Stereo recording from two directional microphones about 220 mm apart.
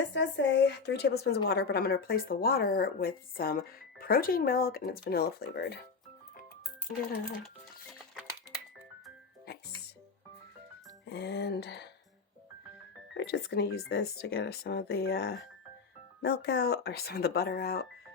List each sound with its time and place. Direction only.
0.1 s speech: 55° left (ahead or behind)
11.1 s speech: 50° left (ahead or behind)
13.1 s speech: 50° left (ahead or behind)